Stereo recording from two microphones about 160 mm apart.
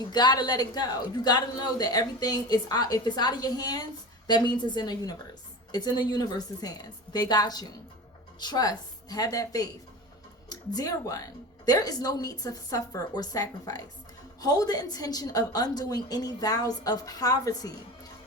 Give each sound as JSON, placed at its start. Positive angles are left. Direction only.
{"t": 0.1, "sound": "a woman's voice", "side_deg": 25}